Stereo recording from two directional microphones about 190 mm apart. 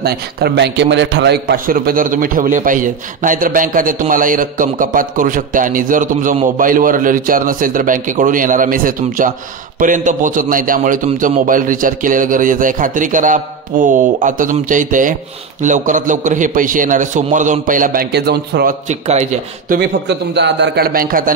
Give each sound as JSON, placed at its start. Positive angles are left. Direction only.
{"t": 0.0, "sound": "a man's voice", "side_deg": -60}
{"t": 18.1, "sound": "a man's voice", "side_deg": -60}
{"t": 18.9, "sound": "speech", "side_deg": -35}
{"t": 19.7, "sound": "a man's voice", "side_deg": -60}